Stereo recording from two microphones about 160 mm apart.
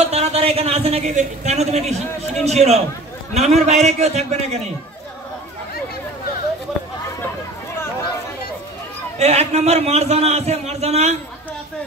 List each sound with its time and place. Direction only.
0.0 s a man's voice: 40° right (ahead or behind)
9.2 s a man's voice: 45° right (ahead or behind)